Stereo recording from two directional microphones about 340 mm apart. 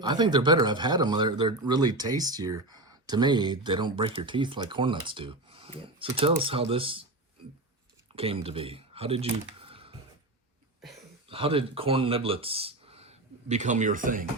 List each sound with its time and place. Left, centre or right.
0.0 s speech: centre
8.1 s speech: centre
11.3 s speech: centre